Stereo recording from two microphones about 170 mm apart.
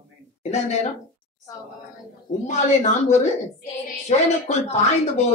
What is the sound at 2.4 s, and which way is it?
A woman's voice, 45° left (ahead or behind).